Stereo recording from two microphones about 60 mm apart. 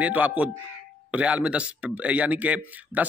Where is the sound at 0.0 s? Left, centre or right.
Right.